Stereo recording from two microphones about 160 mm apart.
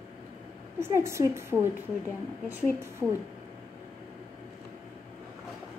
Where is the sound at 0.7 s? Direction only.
15° right (ahead or behind).